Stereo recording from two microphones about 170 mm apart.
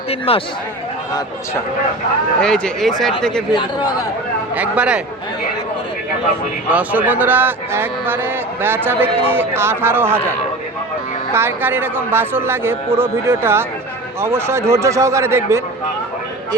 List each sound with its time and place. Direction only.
0.1 s speech: 35° left (ahead or behind)
2.4 s speech: 5° left (ahead or behind)
3.5 s speech: 25° left (ahead or behind)
4.5 s a man's voice: 10° right (ahead or behind)
6.7 s a man's voice: 10° right (ahead or behind)
11.3 s a man's voice: 15° right (ahead or behind)